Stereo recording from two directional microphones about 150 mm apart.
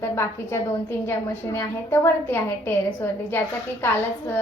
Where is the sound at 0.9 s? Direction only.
15° left (ahead or behind).